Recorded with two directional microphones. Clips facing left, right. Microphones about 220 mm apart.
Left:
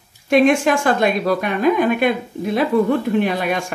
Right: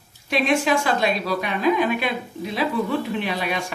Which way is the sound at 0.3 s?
50° left (ahead or behind).